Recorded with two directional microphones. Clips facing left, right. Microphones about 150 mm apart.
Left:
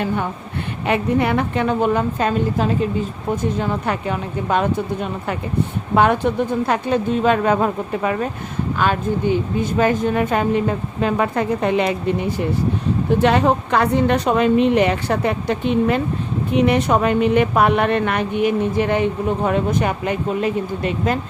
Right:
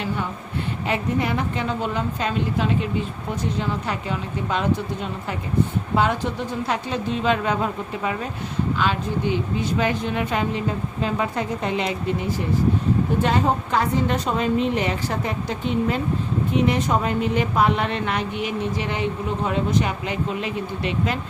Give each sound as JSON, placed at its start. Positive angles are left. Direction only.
{"t": 0.9, "sound": "a woman's voice", "side_deg": 60}
{"t": 3.6, "sound": "a woman's voice", "side_deg": 55}
{"t": 5.9, "sound": "a woman's voice", "side_deg": 60}
{"t": 11.0, "sound": "speech", "side_deg": 60}
{"t": 13.2, "sound": "a woman's voice", "side_deg": 70}